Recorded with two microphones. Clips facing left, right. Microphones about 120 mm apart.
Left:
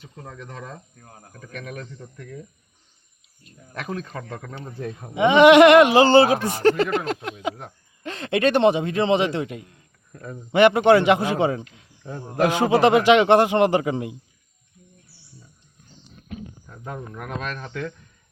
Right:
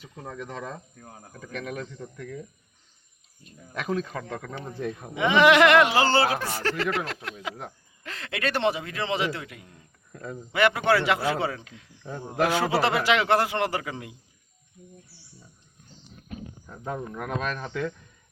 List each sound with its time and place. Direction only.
0.0 s speech: 10° right (ahead or behind)
3.7 s speech: 5° right (ahead or behind)
5.1 s a man's voice: 20° left (ahead or behind)
10.1 s speech: 10° left (ahead or behind)
10.5 s a man's voice: 25° left (ahead or behind)
16.6 s speech: 5° right (ahead or behind)